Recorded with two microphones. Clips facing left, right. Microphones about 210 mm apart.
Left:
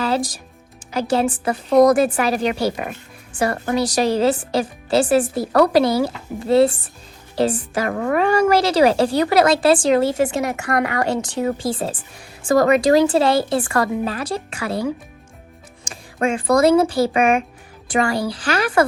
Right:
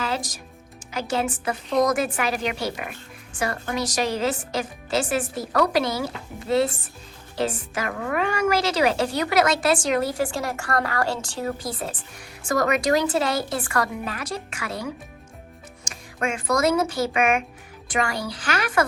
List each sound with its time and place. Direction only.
0.0 s music: 35° left (ahead or behind)
0.9 s a woman's voice: 35° left (ahead or behind)
15.9 s a woman's voice: 35° left (ahead or behind)